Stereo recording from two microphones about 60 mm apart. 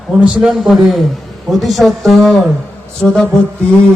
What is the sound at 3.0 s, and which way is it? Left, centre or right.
Music, centre.